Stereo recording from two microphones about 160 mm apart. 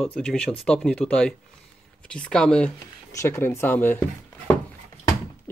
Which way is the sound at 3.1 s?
15° left (ahead or behind).